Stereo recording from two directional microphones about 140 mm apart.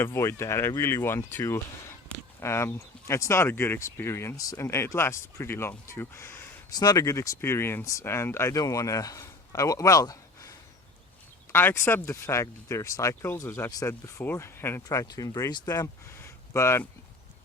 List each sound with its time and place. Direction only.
0.0 s speech: 20° left (ahead or behind)
11.5 s speech: 15° left (ahead or behind)